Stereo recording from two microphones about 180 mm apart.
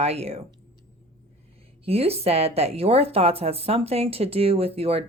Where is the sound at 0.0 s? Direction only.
35° right (ahead or behind).